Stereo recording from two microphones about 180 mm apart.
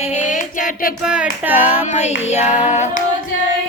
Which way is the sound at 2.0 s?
40° left (ahead or behind).